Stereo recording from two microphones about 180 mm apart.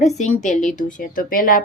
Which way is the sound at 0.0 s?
40° left (ahead or behind).